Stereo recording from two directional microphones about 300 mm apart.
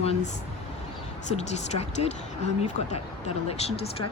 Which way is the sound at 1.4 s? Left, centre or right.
Left.